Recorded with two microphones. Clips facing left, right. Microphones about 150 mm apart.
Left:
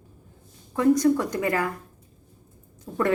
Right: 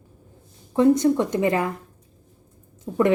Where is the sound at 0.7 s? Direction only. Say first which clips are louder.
Right 2 dB; 25° right (ahead or behind).